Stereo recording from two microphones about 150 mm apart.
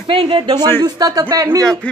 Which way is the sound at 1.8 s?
10° left (ahead or behind).